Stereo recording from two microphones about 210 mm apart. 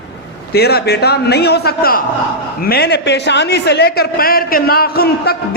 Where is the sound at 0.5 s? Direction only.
50° left (ahead or behind).